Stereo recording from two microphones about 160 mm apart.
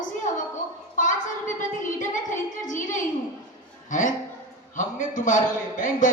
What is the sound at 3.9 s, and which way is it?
A man's voice, 55° left (ahead or behind).